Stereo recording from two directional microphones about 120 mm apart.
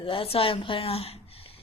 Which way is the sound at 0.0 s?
50° left (ahead or behind).